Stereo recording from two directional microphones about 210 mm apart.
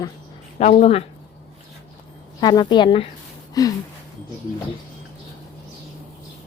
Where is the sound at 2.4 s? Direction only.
20° left (ahead or behind).